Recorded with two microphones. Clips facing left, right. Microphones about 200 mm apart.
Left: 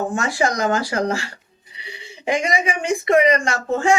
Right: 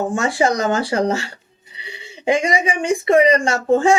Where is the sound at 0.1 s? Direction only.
30° right (ahead or behind).